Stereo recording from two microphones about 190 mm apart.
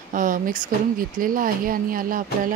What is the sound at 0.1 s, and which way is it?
Speech, 45° right (ahead or behind).